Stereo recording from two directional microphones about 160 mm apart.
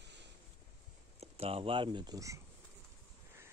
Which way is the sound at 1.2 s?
35° right (ahead or behind).